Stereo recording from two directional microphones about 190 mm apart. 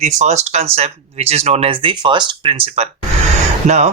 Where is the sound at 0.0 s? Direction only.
40° right (ahead or behind).